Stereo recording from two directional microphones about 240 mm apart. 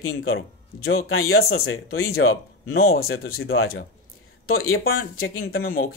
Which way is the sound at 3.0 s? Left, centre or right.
Left.